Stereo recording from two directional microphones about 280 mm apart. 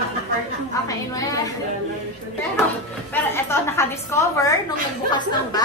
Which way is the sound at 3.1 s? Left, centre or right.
Centre.